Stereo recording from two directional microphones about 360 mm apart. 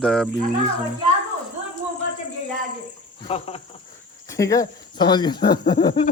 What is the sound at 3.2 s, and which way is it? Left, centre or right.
Speech, centre.